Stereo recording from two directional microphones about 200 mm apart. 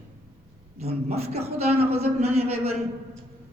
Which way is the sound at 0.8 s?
30° right (ahead or behind).